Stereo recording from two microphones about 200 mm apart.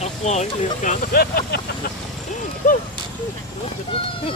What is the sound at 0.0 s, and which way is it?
Speech, 35° left (ahead or behind).